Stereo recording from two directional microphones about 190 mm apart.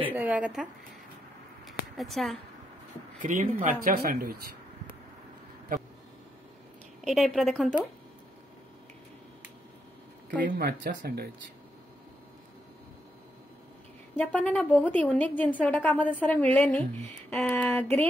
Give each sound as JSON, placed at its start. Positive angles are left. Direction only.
{"t": 0.0, "sound": "speech", "side_deg": -10}
{"t": 2.0, "sound": "a woman's voice", "side_deg": 0}
{"t": 3.2, "sound": "speech", "side_deg": -40}
{"t": 7.1, "sound": "a woman's voice", "side_deg": 0}
{"t": 10.4, "sound": "speech", "side_deg": -50}
{"t": 14.1, "sound": "a woman's voice", "side_deg": 5}